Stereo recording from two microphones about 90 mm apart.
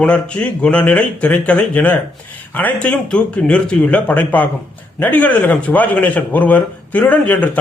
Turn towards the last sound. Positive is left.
turn(degrees=15)  # may be behind; listen again after turning